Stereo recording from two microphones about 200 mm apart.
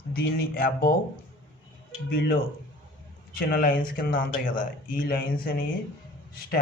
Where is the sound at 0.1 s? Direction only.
50° left (ahead or behind).